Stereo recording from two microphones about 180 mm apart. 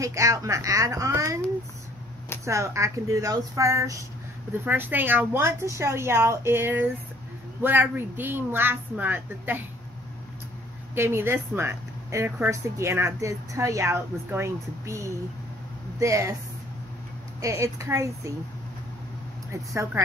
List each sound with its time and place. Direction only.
0.0 s a woman's voice: 15° right (ahead or behind)
2.4 s a woman's voice: 15° right (ahead or behind)
11.0 s a woman's voice: 15° right (ahead or behind)
17.4 s a woman's voice: 15° right (ahead or behind)
19.5 s a woman's voice: 15° right (ahead or behind)